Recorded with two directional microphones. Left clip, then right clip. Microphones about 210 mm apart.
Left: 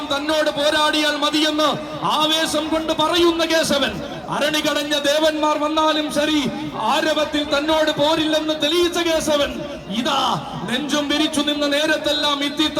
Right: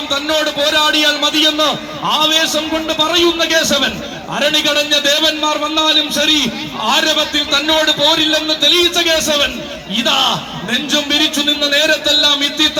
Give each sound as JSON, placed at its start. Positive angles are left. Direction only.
{"t": 0.1, "sound": "a man's voice", "side_deg": 55}